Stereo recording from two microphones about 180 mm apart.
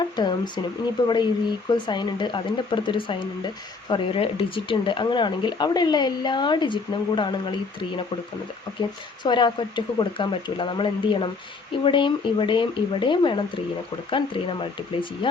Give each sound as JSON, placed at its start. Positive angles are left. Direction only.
{"t": 0.0, "sound": "speech", "side_deg": 25}
{"t": 9.2, "sound": "speech", "side_deg": 25}